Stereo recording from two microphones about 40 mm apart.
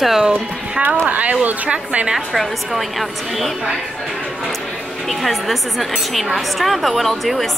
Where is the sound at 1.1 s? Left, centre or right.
Right.